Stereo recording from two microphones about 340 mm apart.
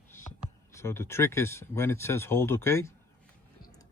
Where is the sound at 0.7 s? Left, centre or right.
Centre.